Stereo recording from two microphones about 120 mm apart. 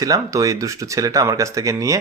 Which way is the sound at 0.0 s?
30° right (ahead or behind).